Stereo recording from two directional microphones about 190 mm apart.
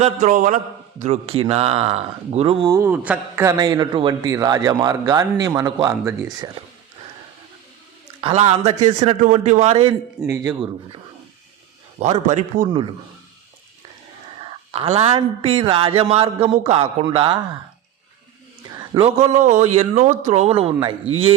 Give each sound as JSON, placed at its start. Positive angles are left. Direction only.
{"t": 0.0, "sound": "a man's voice", "side_deg": -35}
{"t": 2.9, "sound": "a man's voice", "side_deg": -5}
{"t": 8.2, "sound": "a man's voice", "side_deg": -35}
{"t": 10.2, "sound": "speech", "side_deg": -15}
{"t": 11.9, "sound": "a man's voice", "side_deg": -35}
{"t": 14.7, "sound": "a man's voice", "side_deg": -30}
{"t": 18.7, "sound": "a man's voice", "side_deg": -25}